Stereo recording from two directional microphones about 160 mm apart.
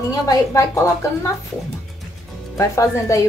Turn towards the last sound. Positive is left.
turn(degrees=20)  # may be behind; listen again after turning